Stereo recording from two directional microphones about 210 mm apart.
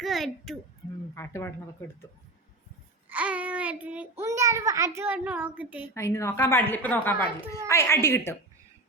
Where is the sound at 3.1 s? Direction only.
5° right (ahead or behind).